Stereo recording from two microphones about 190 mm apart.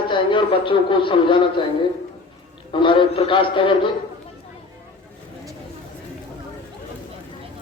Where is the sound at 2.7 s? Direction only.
25° left (ahead or behind).